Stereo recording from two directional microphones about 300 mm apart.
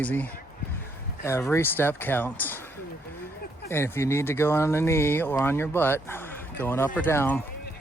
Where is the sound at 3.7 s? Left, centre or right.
Centre.